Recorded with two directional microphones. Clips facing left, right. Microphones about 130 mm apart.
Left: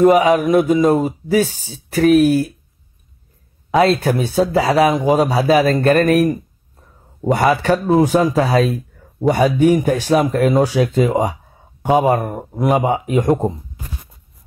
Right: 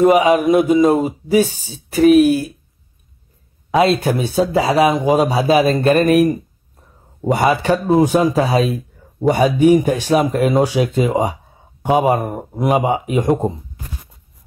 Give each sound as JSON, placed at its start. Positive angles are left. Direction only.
{"t": 0.3, "sound": "speech", "side_deg": -25}
{"t": 3.8, "sound": "speech", "side_deg": -20}
{"t": 7.3, "sound": "speech", "side_deg": -20}